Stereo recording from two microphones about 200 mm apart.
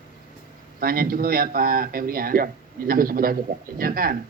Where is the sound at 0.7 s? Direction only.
45° right (ahead or behind).